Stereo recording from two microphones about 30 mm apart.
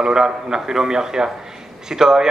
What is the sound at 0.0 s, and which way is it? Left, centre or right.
A man's voice, right.